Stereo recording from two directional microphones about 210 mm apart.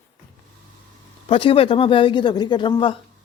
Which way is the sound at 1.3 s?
25° left (ahead or behind).